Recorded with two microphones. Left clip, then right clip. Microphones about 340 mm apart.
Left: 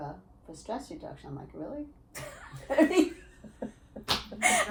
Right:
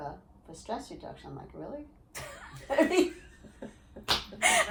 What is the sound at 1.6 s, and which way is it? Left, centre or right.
A woman's voice, centre.